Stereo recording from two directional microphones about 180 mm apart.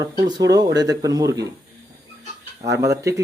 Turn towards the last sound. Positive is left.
turn(degrees=-15)  # may be behind; listen again after turning